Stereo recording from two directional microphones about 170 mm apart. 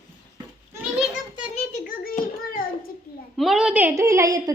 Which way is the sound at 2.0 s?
55° left (ahead or behind).